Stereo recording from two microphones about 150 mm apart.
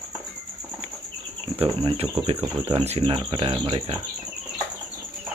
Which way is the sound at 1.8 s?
40° right (ahead or behind).